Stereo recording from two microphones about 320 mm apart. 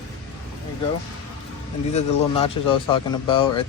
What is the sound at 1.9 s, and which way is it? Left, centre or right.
Speech, centre.